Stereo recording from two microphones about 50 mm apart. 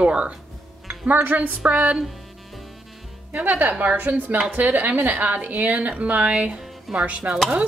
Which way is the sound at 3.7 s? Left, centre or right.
Right.